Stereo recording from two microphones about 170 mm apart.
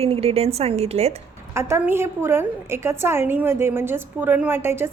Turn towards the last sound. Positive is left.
turn(degrees=-15)  # may be behind; listen again after turning